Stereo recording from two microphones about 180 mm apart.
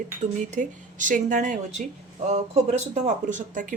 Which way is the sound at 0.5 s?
45° right (ahead or behind).